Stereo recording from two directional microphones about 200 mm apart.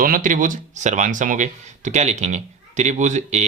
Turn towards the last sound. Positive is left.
turn(degrees=-35)  # may be behind; listen again after turning